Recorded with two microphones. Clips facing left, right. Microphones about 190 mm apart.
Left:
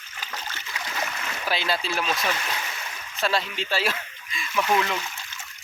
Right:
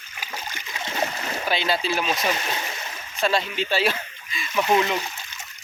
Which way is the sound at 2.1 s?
20° right (ahead or behind).